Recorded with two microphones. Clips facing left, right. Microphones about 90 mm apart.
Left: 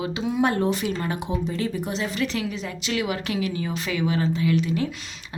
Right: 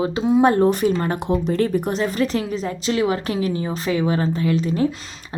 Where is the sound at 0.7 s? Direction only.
45° right (ahead or behind).